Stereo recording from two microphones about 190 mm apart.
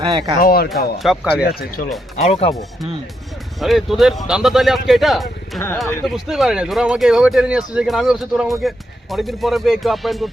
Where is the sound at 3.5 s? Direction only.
Centre (ahead or behind).